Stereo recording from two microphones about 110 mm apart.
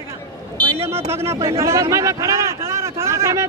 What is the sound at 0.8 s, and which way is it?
Speech, 25° right (ahead or behind).